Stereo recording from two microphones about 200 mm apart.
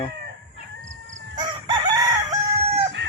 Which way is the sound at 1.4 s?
20° right (ahead or behind).